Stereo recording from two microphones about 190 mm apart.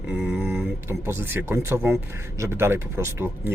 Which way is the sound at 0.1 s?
10° right (ahead or behind).